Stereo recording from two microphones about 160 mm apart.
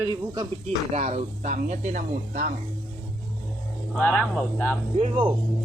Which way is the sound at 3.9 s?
10° left (ahead or behind).